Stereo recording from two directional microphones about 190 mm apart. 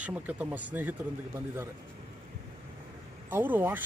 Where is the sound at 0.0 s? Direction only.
10° right (ahead or behind).